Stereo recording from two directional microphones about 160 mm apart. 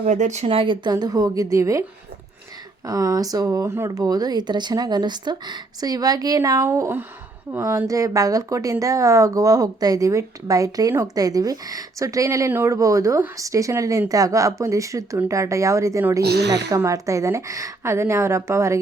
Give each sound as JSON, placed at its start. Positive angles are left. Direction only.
{"t": 0.0, "sound": "speech", "side_deg": -50}
{"t": 2.8, "sound": "speech", "side_deg": -20}
{"t": 16.2, "sound": "a woman's voice", "side_deg": -90}
{"t": 16.6, "sound": "a woman's voice", "side_deg": -20}